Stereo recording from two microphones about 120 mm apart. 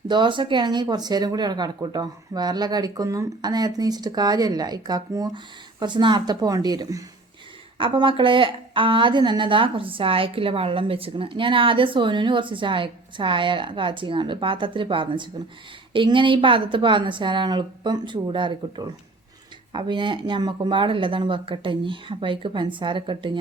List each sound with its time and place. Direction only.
0.1 s speech: 40° right (ahead or behind)
7.8 s a woman's voice: 45° right (ahead or behind)